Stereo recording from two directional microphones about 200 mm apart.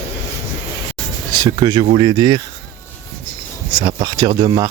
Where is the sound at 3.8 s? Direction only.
20° right (ahead or behind).